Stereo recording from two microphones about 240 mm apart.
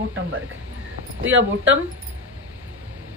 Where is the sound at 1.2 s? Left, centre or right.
Right.